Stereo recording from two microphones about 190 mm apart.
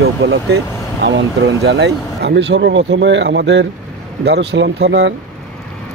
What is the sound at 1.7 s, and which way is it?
Speech, 65° right (ahead or behind).